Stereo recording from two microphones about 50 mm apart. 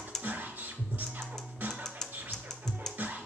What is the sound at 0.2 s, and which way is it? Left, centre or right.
Music, right.